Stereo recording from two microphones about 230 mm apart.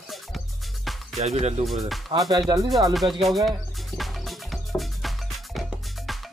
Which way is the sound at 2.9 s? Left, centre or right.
Centre.